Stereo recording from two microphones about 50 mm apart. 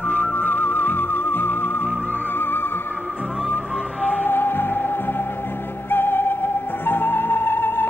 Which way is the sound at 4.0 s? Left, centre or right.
Left.